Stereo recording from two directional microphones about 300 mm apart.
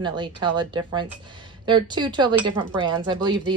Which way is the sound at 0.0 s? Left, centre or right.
Centre.